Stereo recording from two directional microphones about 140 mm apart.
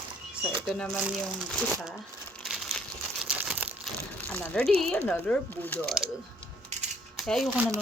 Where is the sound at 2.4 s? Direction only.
Centre (ahead or behind).